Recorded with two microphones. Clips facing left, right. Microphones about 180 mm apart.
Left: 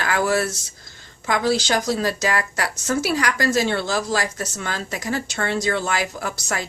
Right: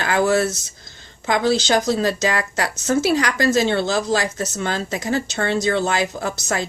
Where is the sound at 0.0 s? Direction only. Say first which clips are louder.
Right 3 dB; 25° right (ahead or behind).